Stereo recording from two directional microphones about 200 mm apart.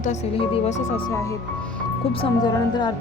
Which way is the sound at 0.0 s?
35° left (ahead or behind).